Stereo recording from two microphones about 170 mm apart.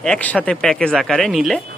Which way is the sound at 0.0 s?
5° left (ahead or behind).